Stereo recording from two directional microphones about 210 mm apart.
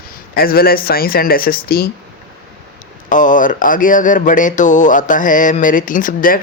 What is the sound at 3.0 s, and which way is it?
Speech, 40° left (ahead or behind).